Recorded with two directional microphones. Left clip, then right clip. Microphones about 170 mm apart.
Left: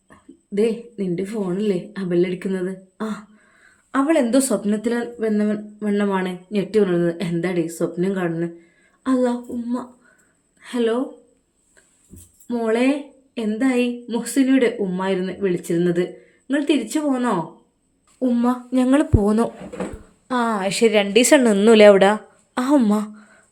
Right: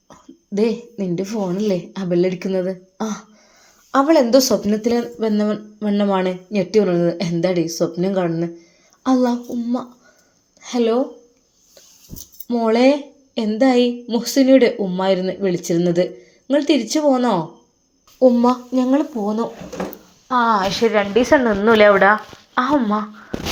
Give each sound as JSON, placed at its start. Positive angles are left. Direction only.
{"t": 0.1, "sound": "a sound", "side_deg": -20}
{"t": 1.2, "sound": "a woman's voice", "side_deg": -15}
{"t": 3.9, "sound": "speech", "side_deg": -5}
{"t": 4.9, "sound": "a woman's voice", "side_deg": -20}
{"t": 12.1, "sound": "a sound", "side_deg": -70}
{"t": 12.5, "sound": "a woman's voice", "side_deg": -15}
{"t": 18.4, "sound": "speech", "side_deg": 20}
{"t": 18.9, "sound": "speech", "side_deg": 40}
{"t": 21.2, "sound": "a woman's voice", "side_deg": 70}